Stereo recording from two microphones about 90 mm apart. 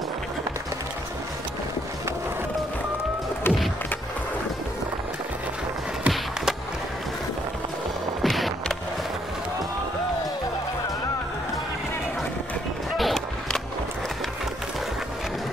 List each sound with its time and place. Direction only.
3.4 s music: 25° left (ahead or behind)
6.0 s skateboard: 5° right (ahead or behind)
8.2 s music: centre (ahead or behind)
12.9 s a sound: centre (ahead or behind)